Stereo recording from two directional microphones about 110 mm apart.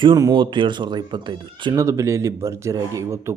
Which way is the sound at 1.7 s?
25° right (ahead or behind).